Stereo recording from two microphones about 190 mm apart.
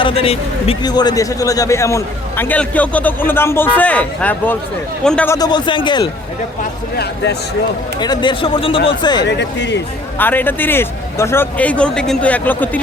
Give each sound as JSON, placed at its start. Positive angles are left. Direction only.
{"t": 0.0, "sound": "a man's voice", "side_deg": 30}
{"t": 6.9, "sound": "speech", "side_deg": 60}
{"t": 7.9, "sound": "a man's voice", "side_deg": 20}
{"t": 9.2, "sound": "speech", "side_deg": 65}
{"t": 10.2, "sound": "a man's voice", "side_deg": 10}